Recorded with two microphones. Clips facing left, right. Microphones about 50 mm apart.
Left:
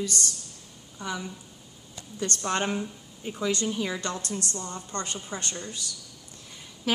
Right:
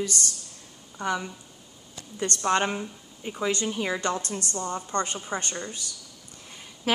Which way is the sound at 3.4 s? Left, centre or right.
Right.